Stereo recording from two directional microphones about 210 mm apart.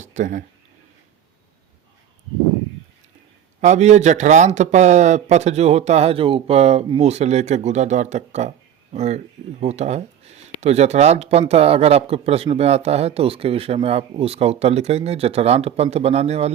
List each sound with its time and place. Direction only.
0.0 s speech: 35° right (ahead or behind)
3.6 s speech: 35° right (ahead or behind)